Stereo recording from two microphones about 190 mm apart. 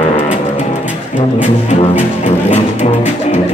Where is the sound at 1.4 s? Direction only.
40° left (ahead or behind).